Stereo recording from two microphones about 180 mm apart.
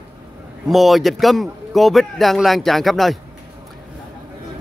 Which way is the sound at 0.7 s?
Centre (ahead or behind).